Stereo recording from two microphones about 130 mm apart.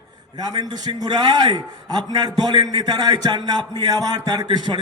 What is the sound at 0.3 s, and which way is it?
A man's voice, 30° right (ahead or behind).